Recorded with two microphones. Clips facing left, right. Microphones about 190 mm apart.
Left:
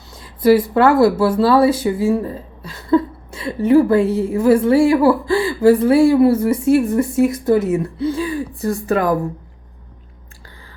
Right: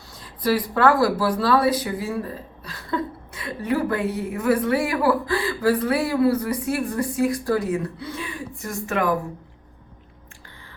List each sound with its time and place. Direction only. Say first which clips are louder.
0.4 s speech: left 7 dB; 25° left (ahead or behind)